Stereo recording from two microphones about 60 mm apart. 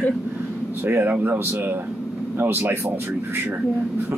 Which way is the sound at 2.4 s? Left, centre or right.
Right.